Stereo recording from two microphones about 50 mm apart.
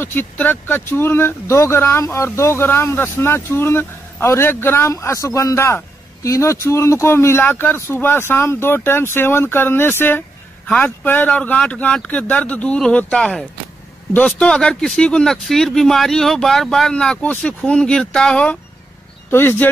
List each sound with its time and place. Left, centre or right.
0.0 s speech: left
2.1 s speech: left
4.8 s speech: left
7.4 s speech: left
11.2 s speech: left
13.1 s speech: centre
17.2 s speech: left
19.3 s speech: left